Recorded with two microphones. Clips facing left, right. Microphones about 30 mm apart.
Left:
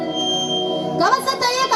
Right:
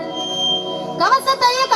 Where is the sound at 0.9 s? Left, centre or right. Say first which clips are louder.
Right 3 dB; right.